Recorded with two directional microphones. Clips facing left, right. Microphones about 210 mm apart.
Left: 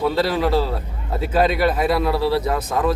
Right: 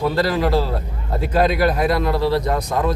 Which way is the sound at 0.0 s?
Centre (ahead or behind).